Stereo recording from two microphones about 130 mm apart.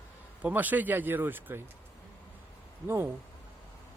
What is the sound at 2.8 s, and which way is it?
Speech, 20° right (ahead or behind).